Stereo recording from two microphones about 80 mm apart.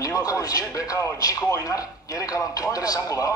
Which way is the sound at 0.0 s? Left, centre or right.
Left.